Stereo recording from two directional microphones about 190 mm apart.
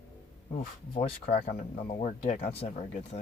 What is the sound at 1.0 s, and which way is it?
Speech, 35° left (ahead or behind).